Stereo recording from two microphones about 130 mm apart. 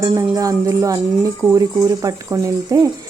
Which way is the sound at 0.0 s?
25° right (ahead or behind).